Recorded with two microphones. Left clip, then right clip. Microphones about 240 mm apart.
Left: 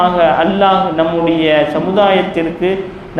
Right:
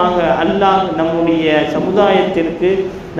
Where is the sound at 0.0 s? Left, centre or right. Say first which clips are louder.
Left 3 dB; left.